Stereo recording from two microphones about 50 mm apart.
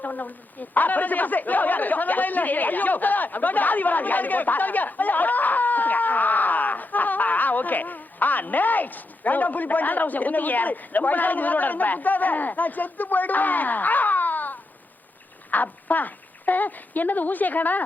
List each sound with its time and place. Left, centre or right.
0.0 s a woman's voice: left